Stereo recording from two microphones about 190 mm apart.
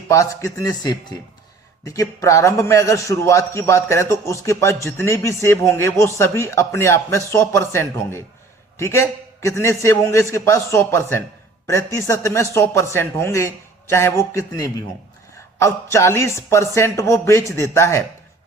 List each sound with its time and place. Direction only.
0.1 s a man's voice: 15° left (ahead or behind)